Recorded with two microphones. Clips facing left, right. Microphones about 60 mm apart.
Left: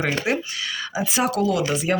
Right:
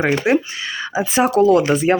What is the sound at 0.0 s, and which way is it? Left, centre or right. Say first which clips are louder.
Speech: right 7 dB; right.